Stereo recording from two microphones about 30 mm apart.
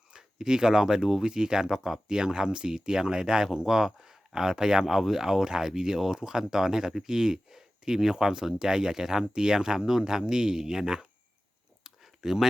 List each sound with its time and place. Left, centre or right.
0.1 s speech: right
4.9 s speech: centre
11.8 s a sound: centre